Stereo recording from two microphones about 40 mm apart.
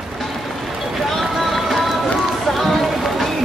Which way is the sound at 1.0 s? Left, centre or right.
Centre.